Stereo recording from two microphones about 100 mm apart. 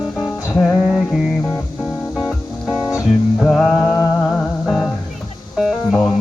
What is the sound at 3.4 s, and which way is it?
Music, 5° left (ahead or behind).